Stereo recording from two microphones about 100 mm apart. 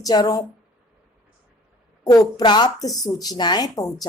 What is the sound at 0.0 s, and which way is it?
Speech, 40° left (ahead or behind).